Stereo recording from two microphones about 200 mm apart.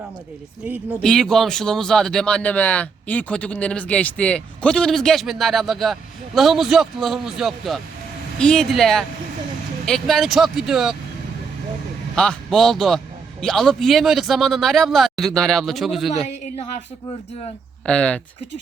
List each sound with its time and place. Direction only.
0.9 s speech: 5° left (ahead or behind)
12.1 s speech: 5° left (ahead or behind)
16.3 s a woman's voice: 35° left (ahead or behind)
17.8 s speech: 5° left (ahead or behind)